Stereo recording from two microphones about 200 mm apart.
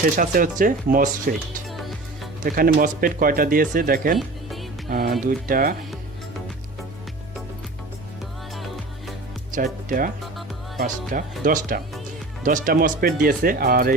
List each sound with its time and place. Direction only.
0.2 s speech: 45° right (ahead or behind)
2.4 s speech: 45° right (ahead or behind)
8.5 s music: centre (ahead or behind)
10.8 s speech: 45° right (ahead or behind)